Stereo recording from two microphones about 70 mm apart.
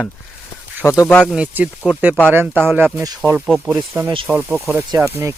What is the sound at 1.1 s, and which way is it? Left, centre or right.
Speech, centre.